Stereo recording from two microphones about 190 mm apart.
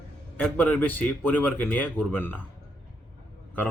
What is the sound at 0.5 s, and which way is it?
Speech, 10° left (ahead or behind).